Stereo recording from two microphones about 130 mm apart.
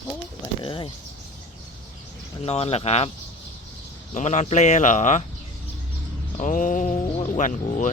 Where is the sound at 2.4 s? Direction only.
50° left (ahead or behind).